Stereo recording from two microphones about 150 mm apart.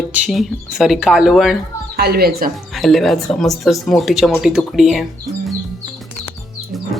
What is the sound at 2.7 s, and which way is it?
Speech, centre (ahead or behind).